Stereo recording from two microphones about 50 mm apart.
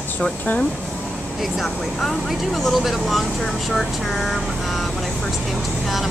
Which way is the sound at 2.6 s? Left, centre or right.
Centre.